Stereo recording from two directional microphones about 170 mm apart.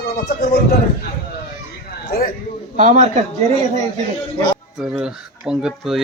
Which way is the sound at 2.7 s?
50° right (ahead or behind).